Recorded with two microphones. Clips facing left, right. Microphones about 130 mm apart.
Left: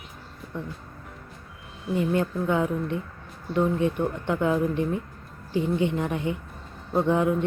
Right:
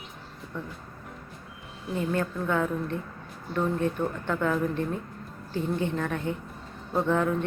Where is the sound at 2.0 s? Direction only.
15° left (ahead or behind).